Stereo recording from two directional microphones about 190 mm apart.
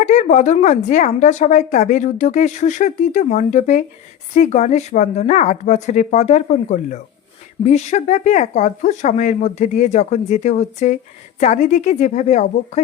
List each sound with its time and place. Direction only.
0.0 s speech: 40° left (ahead or behind)